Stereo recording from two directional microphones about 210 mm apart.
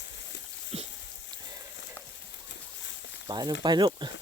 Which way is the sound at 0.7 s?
30° right (ahead or behind).